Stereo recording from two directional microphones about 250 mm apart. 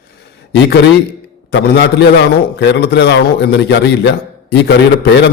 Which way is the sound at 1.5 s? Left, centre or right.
Left.